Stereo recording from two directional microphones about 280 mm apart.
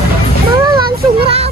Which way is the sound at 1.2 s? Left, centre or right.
Right.